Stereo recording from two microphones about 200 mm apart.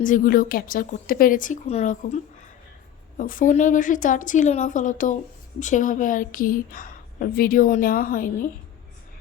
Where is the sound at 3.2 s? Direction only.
40° left (ahead or behind).